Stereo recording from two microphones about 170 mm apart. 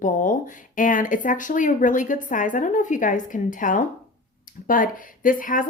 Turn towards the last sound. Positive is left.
turn(degrees=55)  # may be behind; listen again after turning